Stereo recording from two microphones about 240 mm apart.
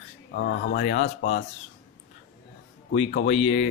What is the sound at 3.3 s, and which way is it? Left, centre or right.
Speech, left.